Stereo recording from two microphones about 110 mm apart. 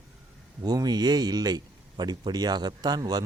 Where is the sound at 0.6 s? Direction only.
40° right (ahead or behind).